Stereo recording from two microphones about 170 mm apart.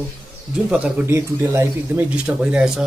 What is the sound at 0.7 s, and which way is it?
Speech, 10° right (ahead or behind).